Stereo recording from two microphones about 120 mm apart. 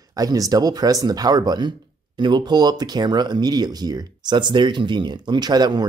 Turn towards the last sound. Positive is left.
turn(degrees=-35)  # may be behind; listen again after turning